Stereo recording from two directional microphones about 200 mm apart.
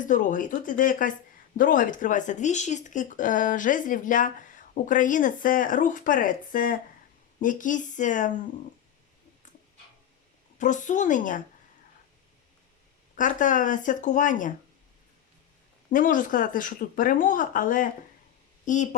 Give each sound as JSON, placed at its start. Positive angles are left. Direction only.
{"t": 0.0, "sound": "speech", "side_deg": 40}
{"t": 10.6, "sound": "speech", "side_deg": 40}
{"t": 13.1, "sound": "speech", "side_deg": 40}
{"t": 15.9, "sound": "speech", "side_deg": 40}